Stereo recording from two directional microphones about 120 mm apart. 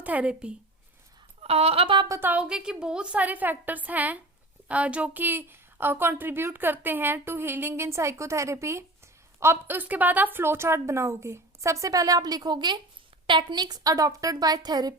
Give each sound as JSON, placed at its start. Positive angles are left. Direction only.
{"t": 0.0, "sound": "a woman's voice", "side_deg": -10}
{"t": 1.4, "sound": "speech", "side_deg": -55}
{"t": 2.0, "sound": "a woman's voice", "side_deg": -25}
{"t": 2.3, "sound": "a woman's voice", "side_deg": -10}